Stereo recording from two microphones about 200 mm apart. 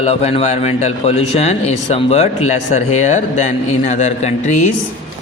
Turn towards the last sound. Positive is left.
turn(degrees=35)  # may be behind; listen again after turning